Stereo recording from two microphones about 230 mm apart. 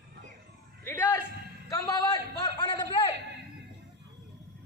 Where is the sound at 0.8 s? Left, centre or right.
Centre.